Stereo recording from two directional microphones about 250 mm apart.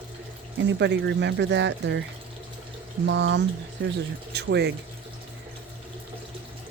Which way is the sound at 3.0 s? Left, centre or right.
Right.